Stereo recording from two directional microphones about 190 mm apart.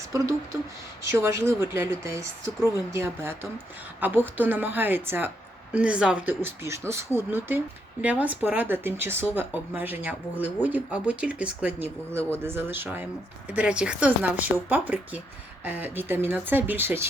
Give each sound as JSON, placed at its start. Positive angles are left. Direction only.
{"t": 0.0, "sound": "speech", "side_deg": -15}